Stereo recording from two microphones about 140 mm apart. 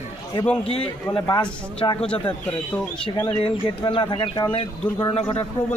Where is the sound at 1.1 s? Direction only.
35° left (ahead or behind).